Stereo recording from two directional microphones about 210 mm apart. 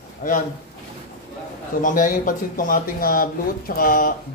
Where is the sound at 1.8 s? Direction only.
40° left (ahead or behind).